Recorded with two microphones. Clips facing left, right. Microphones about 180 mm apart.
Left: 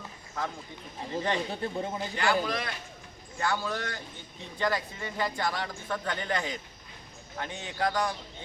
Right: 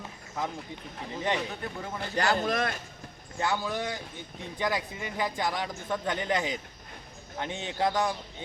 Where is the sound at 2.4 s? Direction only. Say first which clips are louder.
Right 4 dB; 45° right (ahead or behind).